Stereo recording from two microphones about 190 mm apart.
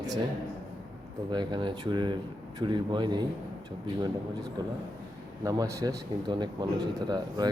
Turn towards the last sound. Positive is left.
turn(degrees=-20)  # may be behind; listen again after turning